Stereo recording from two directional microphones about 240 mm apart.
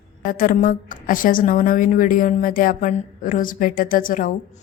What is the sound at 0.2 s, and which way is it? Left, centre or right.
Speech, left.